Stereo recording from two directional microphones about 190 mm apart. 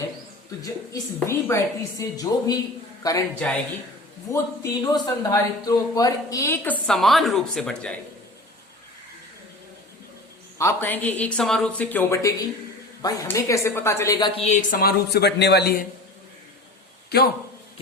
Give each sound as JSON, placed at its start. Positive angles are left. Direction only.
{"t": 1.3, "sound": "a woman's voice", "side_deg": 15}
{"t": 3.4, "sound": "speech", "side_deg": 5}
{"t": 4.3, "sound": "a woman's voice", "side_deg": 15}
{"t": 10.6, "sound": "a woman's voice", "side_deg": 15}